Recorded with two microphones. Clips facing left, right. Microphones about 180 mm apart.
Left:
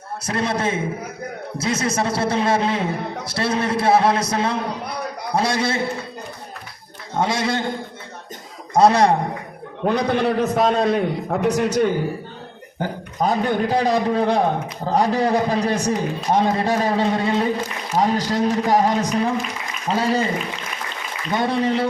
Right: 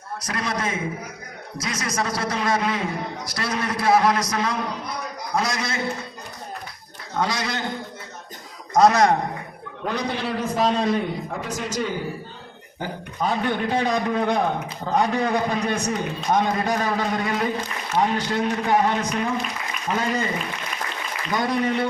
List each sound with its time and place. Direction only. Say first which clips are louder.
0.2 s a man's voice: left 5 dB; 25° left (ahead or behind)
7.1 s a man's voice: left 4 dB; 25° left (ahead or behind)
8.7 s a man's voice: left 2 dB; 30° left (ahead or behind)
9.8 s a man's voice: left 7 dB; 55° left (ahead or behind)
12.8 s a man's voice: left 4 dB; 40° left (ahead or behind)
17.9 s a man's voice: left 3 dB; 40° left (ahead or behind)
21.3 s a man's voice: left 3 dB; 30° left (ahead or behind)